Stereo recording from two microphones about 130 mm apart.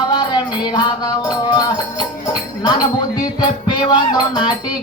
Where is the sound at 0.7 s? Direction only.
35° left (ahead or behind).